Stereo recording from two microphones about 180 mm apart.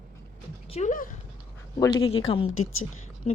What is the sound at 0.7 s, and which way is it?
Speech, 40° left (ahead or behind).